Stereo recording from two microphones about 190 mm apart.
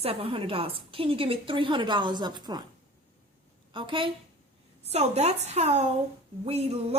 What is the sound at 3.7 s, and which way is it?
A woman's voice, 25° right (ahead or behind).